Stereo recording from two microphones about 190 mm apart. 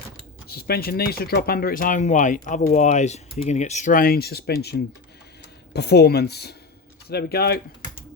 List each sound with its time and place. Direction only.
0.4 s speech: 55° left (ahead or behind)